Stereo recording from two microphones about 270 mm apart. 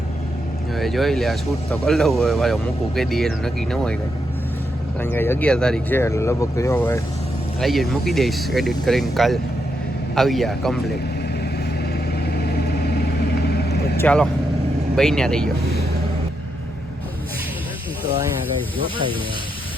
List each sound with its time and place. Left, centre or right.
0.8 s speech: centre
4.9 s speech: centre
11.9 s vehicle: left
14.0 s speech: centre